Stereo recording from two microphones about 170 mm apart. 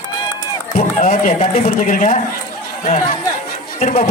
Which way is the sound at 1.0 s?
40° left (ahead or behind).